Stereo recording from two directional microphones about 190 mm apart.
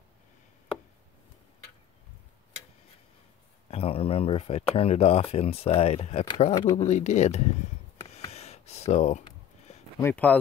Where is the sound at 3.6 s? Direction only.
30° left (ahead or behind).